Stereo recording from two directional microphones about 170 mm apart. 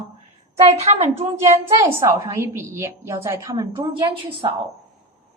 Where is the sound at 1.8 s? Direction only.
15° right (ahead or behind).